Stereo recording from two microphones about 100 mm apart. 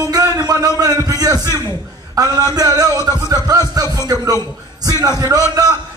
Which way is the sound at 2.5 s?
40° right (ahead or behind).